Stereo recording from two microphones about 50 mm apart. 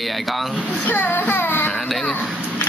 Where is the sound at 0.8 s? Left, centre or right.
Left.